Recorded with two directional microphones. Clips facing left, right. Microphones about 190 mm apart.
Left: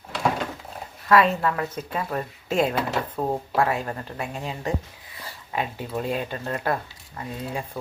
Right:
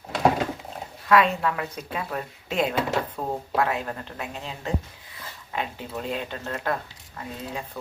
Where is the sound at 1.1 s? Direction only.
Centre (ahead or behind).